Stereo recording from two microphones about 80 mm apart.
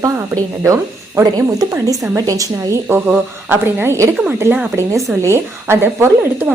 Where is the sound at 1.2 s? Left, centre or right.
Right.